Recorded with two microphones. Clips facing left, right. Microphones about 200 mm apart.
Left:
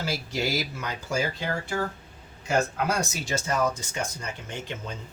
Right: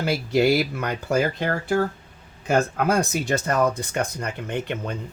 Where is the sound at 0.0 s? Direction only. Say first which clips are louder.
Right 9 dB; 60° right (ahead or behind).